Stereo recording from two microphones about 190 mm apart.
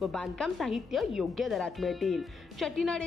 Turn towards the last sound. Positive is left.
turn(degrees=0)  # may be behind; listen again after turning